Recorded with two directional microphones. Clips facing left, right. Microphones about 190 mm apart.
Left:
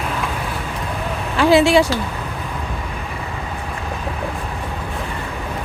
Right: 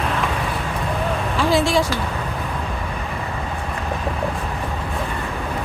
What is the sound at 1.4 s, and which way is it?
Speech, 70° left (ahead or behind).